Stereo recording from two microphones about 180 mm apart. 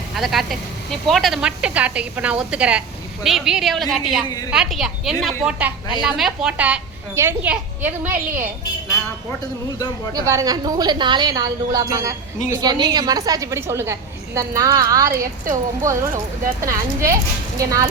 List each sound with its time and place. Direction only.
0.2 s a woman's voice: centre (ahead or behind)
10.1 s a woman's voice: 20° right (ahead or behind)